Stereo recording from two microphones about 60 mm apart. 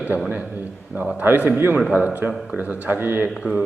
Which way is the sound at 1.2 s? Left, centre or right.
Right.